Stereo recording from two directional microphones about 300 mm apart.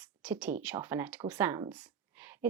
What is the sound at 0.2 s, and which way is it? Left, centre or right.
Speech, centre.